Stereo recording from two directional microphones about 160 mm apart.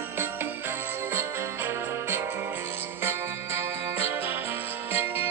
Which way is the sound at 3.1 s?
15° right (ahead or behind).